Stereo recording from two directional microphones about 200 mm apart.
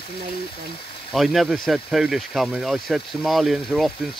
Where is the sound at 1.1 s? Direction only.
Centre (ahead or behind).